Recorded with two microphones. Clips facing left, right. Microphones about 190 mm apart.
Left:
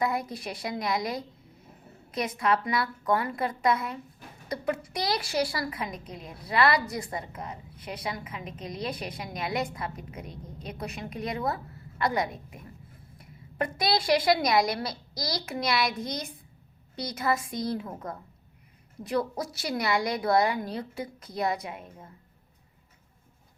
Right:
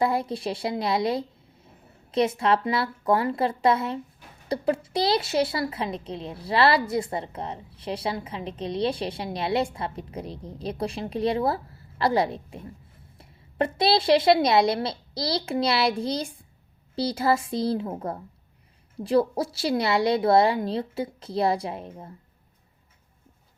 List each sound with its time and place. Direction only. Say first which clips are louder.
0.0 s a woman's voice: right 5 dB; 30° right (ahead or behind)